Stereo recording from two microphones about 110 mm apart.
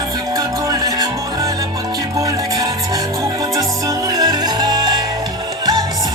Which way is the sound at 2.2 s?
35° right (ahead or behind).